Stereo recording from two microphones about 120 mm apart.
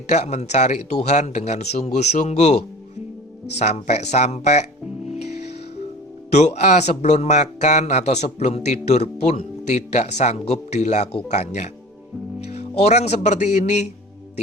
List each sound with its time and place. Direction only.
0.1 s a man's voice: 75° left (ahead or behind)
3.6 s a man's voice: 70° left (ahead or behind)
6.3 s a man's voice: 70° left (ahead or behind)